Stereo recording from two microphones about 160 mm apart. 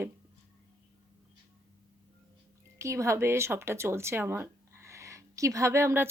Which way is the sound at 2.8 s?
20° right (ahead or behind).